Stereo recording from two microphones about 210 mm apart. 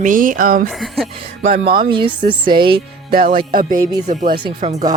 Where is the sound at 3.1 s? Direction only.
45° right (ahead or behind).